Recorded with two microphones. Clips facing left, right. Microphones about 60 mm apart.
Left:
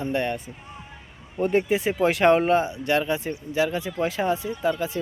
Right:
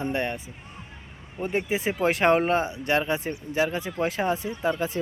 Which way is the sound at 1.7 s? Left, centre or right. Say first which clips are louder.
Left 3 dB; right.